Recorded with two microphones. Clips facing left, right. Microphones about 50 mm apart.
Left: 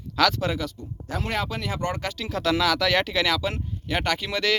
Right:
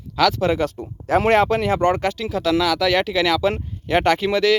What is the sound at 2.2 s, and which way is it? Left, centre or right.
A man's voice, centre.